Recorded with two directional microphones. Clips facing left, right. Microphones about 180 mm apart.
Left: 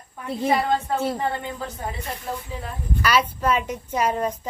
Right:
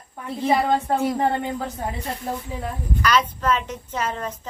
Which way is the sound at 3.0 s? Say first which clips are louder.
Even; 10° left (ahead or behind).